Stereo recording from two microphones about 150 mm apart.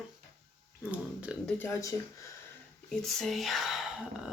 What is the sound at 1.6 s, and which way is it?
Speech, 20° left (ahead or behind).